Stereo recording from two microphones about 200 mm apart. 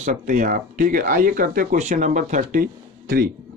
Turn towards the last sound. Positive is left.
turn(degrees=-45)  # may be behind; listen again after turning